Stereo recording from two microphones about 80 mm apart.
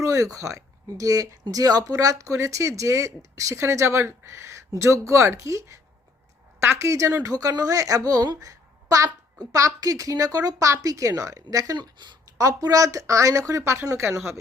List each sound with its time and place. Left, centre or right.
0.0 s a woman's voice: right
12.4 s a woman's voice: right